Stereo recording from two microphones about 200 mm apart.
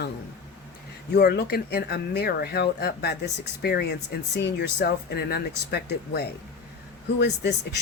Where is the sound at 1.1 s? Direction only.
50° left (ahead or behind).